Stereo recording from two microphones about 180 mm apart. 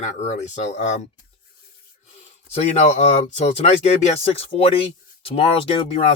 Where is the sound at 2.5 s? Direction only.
40° left (ahead or behind).